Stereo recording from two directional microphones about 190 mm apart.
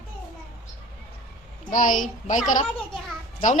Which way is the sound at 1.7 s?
45° left (ahead or behind).